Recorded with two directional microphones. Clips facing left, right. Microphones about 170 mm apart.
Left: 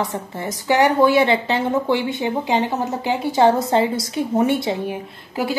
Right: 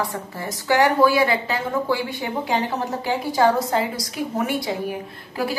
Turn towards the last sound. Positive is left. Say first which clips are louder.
# left 2 dB
turn(degrees=20)  # may be behind; listen again after turning